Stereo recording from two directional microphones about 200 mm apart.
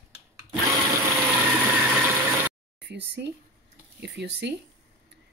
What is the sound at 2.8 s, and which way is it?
Speech, 60° right (ahead or behind).